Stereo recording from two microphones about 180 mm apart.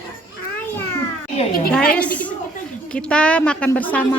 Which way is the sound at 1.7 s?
5° left (ahead or behind).